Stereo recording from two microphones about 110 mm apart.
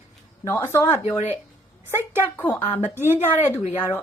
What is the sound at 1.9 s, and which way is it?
Speech, 20° right (ahead or behind).